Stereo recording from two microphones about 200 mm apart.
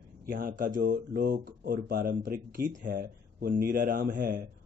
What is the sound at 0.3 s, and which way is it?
Speech, 45° right (ahead or behind).